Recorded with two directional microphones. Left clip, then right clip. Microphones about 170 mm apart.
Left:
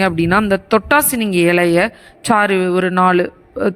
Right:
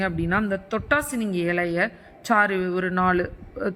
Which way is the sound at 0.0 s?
35° left (ahead or behind).